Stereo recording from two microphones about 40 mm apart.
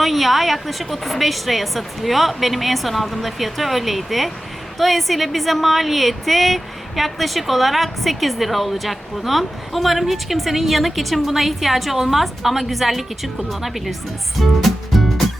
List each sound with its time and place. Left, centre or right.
0.0 s speech: centre
14.3 s music: centre